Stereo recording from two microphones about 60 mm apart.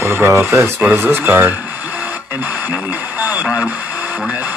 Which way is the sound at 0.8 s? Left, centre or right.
Right.